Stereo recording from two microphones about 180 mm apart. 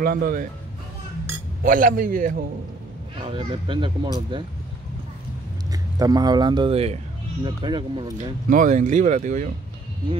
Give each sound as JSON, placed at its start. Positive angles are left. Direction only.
{"t": 0.0, "sound": "speech", "side_deg": -50}
{"t": 1.6, "sound": "speech", "side_deg": -50}
{"t": 3.2, "sound": "speech", "side_deg": -30}
{"t": 5.7, "sound": "speech", "side_deg": -20}
{"t": 8.2, "sound": "speech", "side_deg": -45}